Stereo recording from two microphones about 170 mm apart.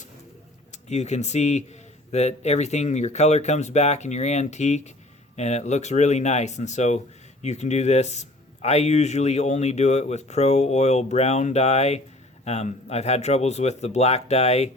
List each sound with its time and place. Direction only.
0.7 s speech: 40° left (ahead or behind)